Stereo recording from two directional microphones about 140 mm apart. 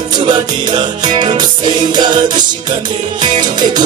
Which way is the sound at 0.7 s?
35° right (ahead or behind).